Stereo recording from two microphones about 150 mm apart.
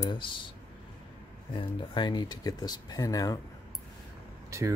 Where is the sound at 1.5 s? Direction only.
30° left (ahead or behind).